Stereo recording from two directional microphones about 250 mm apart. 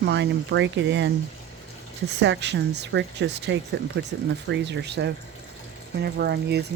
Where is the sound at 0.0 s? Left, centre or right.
Right.